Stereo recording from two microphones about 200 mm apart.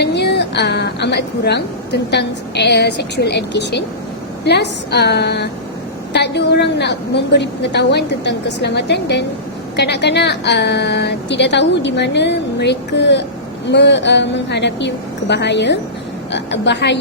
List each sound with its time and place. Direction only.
0.0 s speech: 55° left (ahead or behind)